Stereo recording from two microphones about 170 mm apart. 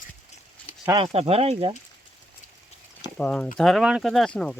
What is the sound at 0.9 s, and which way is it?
Speech, 35° right (ahead or behind).